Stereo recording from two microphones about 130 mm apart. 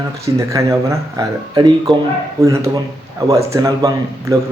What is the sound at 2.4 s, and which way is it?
Speech, 20° right (ahead or behind).